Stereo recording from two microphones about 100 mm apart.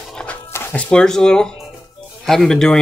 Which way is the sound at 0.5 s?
25° left (ahead or behind).